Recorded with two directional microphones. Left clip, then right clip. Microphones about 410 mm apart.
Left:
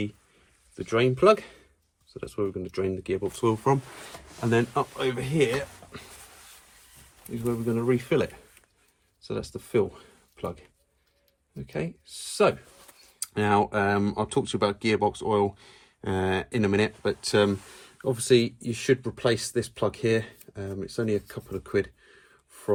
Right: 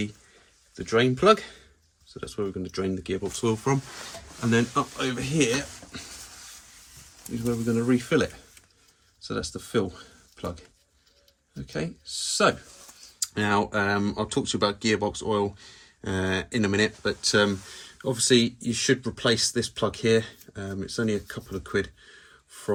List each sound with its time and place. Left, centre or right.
0.9 s speech: centre
7.8 s speech: centre
10.3 s a sound: centre
11.6 s speech: centre